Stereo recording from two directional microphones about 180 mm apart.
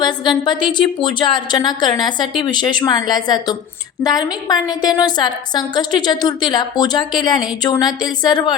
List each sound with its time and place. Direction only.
0.0 s a woman's voice: 25° left (ahead or behind)